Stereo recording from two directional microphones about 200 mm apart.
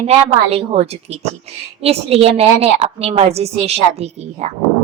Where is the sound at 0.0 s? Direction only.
30° right (ahead or behind).